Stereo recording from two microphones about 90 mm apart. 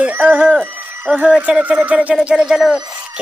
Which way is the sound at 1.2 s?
15° right (ahead or behind).